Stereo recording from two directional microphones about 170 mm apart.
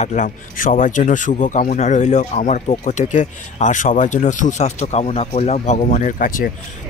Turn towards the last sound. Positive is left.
turn(degrees=50)  # may be behind; listen again after turning